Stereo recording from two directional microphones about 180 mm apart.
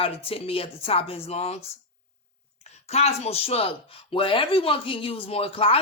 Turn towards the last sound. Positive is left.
turn(degrees=30)  # may be behind; listen again after turning